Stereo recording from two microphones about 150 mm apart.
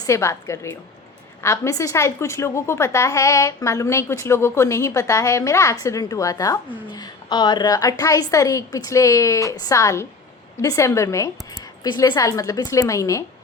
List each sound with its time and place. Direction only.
0.0 s a woman's voice: 20° left (ahead or behind)